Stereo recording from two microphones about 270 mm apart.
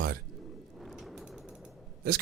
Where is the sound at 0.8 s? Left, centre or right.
Centre.